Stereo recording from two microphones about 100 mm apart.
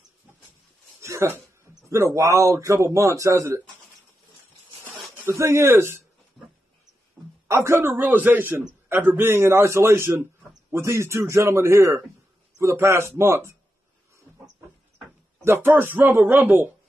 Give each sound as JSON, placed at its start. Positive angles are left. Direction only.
{"t": 1.0, "sound": "a sound", "side_deg": -25}
{"t": 1.9, "sound": "a man's voice", "side_deg": -30}
{"t": 5.2, "sound": "a man's voice", "side_deg": -25}
{"t": 7.4, "sound": "a man's voice", "side_deg": -30}
{"t": 15.4, "sound": "a man's voice", "side_deg": -20}